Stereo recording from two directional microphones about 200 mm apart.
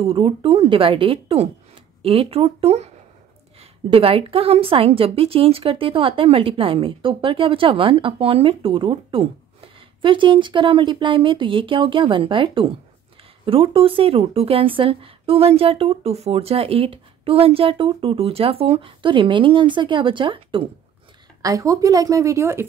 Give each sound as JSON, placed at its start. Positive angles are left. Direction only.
{"t": 0.0, "sound": "a woman's voice", "side_deg": -25}
{"t": 3.9, "sound": "a woman's voice", "side_deg": -30}